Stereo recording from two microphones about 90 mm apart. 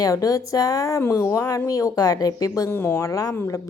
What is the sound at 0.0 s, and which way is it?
A woman's voice, 40° left (ahead or behind).